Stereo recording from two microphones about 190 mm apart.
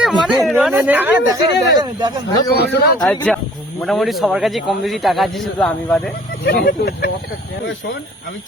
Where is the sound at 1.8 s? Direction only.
20° right (ahead or behind).